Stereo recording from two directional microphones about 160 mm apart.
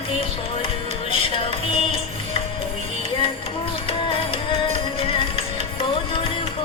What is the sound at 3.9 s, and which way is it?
Music, 35° left (ahead or behind).